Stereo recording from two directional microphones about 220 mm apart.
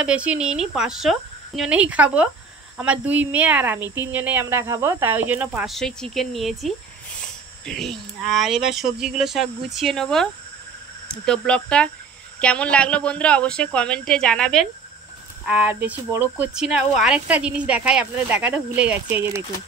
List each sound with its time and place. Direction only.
0.0 s speech: 5° right (ahead or behind)
11.2 s speech: 5° left (ahead or behind)